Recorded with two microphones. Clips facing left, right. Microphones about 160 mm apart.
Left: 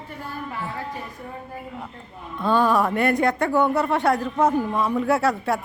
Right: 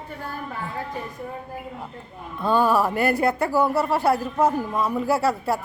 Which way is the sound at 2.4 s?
5° right (ahead or behind).